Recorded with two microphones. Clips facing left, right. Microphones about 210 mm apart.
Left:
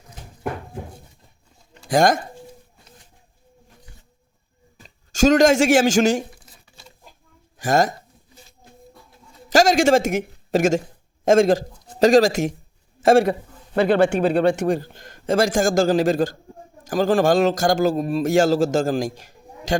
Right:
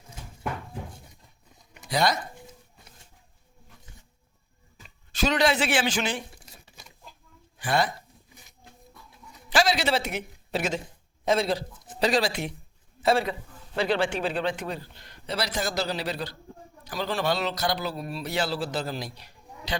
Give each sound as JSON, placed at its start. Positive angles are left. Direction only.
{"t": 1.9, "sound": "a man's voice", "side_deg": 50}
{"t": 4.8, "sound": "speech", "side_deg": 45}
{"t": 7.6, "sound": "a man's voice", "side_deg": 45}
{"t": 9.5, "sound": "a man's voice", "side_deg": 45}
{"t": 13.7, "sound": "a man's voice", "side_deg": 55}